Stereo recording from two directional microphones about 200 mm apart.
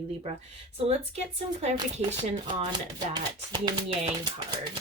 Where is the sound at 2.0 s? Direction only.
25° right (ahead or behind).